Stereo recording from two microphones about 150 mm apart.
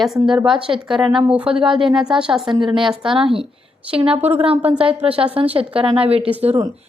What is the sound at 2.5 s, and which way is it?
A woman's voice, 30° right (ahead or behind).